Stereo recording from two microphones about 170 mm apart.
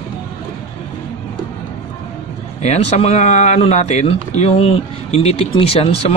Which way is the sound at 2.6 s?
40° left (ahead or behind).